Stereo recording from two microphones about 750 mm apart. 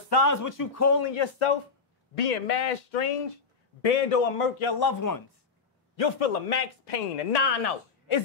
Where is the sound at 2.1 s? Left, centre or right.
Left.